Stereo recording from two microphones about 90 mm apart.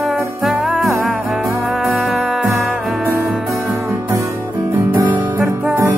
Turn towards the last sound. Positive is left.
turn(degrees=-20)  # may be behind; listen again after turning